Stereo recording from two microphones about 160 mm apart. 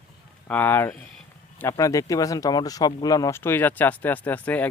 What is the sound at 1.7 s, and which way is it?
Speech, 20° left (ahead or behind).